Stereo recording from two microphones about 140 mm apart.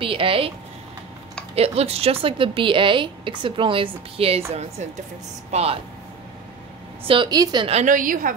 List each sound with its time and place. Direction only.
0.0 s a woman's voice: 40° right (ahead or behind)
1.5 s a woman's voice: 45° right (ahead or behind)
4.5 s speech: 50° right (ahead or behind)
7.1 s a woman's voice: 35° right (ahead or behind)
7.8 s a woman's voice: 75° right (ahead or behind)